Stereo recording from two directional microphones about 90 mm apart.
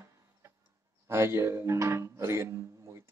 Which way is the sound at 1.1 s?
30° right (ahead or behind).